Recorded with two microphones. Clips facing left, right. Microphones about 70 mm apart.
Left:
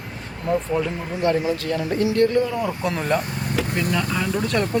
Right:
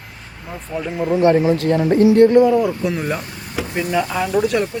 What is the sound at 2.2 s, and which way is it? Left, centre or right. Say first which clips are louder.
Speech: right 7 dB; right.